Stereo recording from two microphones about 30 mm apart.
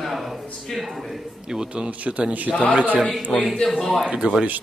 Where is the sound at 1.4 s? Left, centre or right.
Right.